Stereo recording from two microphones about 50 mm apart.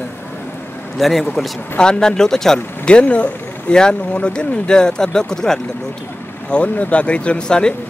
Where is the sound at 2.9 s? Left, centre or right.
Left.